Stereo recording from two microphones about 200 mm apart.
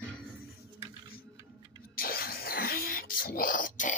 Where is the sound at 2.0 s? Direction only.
45° left (ahead or behind).